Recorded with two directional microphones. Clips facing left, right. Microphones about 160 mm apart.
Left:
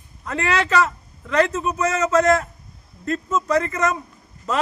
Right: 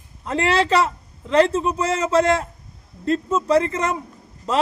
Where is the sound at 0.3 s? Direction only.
30° right (ahead or behind).